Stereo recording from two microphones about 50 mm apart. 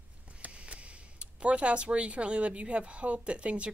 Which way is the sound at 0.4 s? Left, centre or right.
Right.